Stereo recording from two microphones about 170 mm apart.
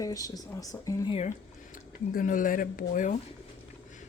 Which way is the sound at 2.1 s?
55° left (ahead or behind).